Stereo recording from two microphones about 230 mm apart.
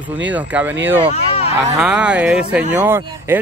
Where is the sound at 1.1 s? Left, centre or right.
Left.